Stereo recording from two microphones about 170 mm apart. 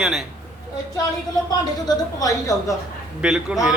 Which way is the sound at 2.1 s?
20° left (ahead or behind).